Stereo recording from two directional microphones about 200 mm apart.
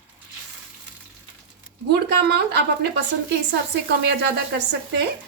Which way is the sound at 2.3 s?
55° right (ahead or behind).